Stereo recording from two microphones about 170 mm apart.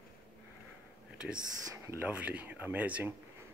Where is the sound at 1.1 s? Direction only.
5° right (ahead or behind).